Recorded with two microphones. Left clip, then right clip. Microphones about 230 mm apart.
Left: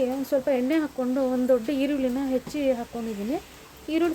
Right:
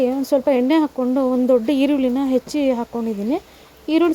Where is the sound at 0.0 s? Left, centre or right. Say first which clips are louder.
Right 7 dB; right.